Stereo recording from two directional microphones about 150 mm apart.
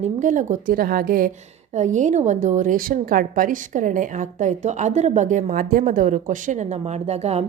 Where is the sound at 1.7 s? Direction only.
55° right (ahead or behind).